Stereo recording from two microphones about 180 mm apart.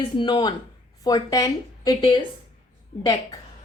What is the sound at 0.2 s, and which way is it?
A woman's voice, 25° left (ahead or behind).